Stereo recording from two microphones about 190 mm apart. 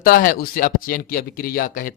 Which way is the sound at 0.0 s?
45° left (ahead or behind).